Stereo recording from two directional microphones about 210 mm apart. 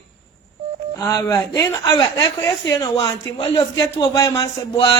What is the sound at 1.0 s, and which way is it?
A woman's voice, 15° left (ahead or behind).